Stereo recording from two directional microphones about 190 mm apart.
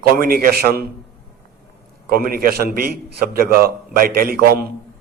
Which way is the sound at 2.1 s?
50° right (ahead or behind).